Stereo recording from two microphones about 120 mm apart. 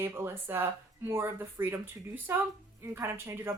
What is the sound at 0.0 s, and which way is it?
Speech, 20° right (ahead or behind).